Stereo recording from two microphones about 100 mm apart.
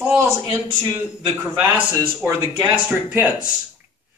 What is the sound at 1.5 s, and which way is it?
A man's voice, 20° right (ahead or behind).